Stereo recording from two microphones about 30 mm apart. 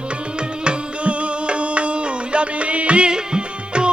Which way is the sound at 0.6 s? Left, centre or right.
Right.